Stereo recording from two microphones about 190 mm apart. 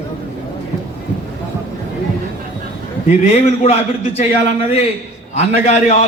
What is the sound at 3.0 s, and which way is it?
A man's voice, 35° left (ahead or behind).